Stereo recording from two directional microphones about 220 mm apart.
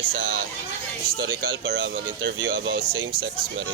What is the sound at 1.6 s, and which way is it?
Speech, 55° right (ahead or behind).